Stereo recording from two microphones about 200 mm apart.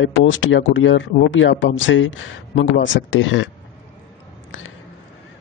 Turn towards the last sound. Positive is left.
turn(degrees=75)  # may be behind; listen again after turning